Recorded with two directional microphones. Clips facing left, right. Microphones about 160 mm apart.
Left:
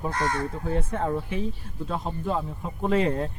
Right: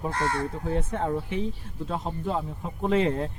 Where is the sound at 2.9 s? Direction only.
25° right (ahead or behind).